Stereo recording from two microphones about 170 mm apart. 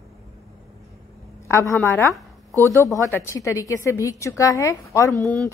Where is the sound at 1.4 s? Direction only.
15° left (ahead or behind).